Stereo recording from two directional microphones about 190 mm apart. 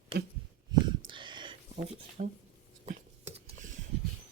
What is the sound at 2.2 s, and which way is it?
Speech, 45° right (ahead or behind).